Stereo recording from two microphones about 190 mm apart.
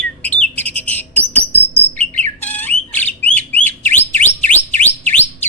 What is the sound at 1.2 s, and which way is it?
Insect, 10° right (ahead or behind).